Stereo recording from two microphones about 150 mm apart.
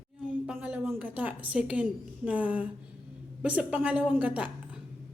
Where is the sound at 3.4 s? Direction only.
10° right (ahead or behind).